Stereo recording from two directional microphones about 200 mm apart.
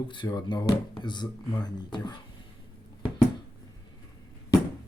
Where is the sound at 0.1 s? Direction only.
20° left (ahead or behind).